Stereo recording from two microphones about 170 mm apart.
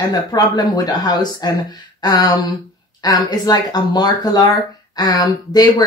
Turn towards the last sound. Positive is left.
turn(degrees=25)  # may be behind; listen again after turning